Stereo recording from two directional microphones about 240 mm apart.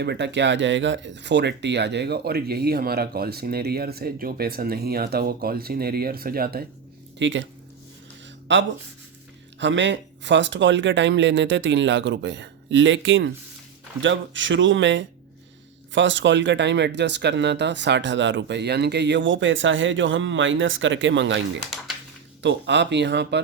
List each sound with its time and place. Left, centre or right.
0.0 s speech: right
7.2 s speech: right
8.5 s speech: right
22.4 s speech: right